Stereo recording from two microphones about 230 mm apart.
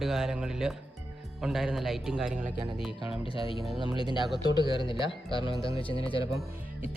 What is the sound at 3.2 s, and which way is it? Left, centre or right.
Speech, left.